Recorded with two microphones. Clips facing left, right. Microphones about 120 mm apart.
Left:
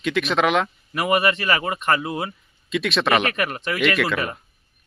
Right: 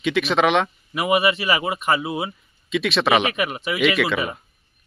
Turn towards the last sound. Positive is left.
turn(degrees=0)  # may be behind; listen again after turning